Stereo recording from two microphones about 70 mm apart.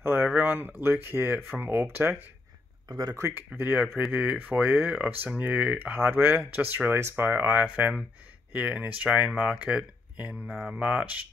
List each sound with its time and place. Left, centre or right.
0.0 s a sound: right
0.3 s speech: right
2.9 s speech: right
3.2 s speech: right; by 10.3 s centre
10.4 s speech: centre
10.8 s speech: centre